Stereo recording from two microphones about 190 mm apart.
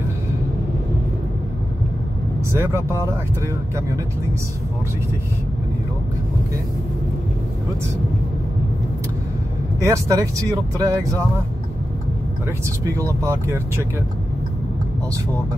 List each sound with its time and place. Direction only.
2.6 s speech: 15° right (ahead or behind)
9.8 s speech: 15° right (ahead or behind)
12.4 s speech: 15° right (ahead or behind)